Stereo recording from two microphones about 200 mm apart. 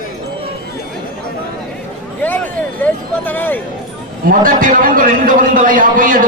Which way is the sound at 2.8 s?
10° left (ahead or behind).